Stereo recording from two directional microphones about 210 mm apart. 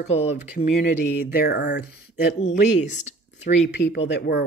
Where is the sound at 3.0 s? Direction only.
35° left (ahead or behind).